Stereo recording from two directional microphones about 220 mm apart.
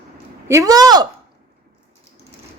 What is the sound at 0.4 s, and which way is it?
Speech, 15° right (ahead or behind).